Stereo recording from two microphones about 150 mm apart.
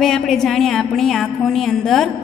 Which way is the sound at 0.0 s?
Centre (ahead or behind).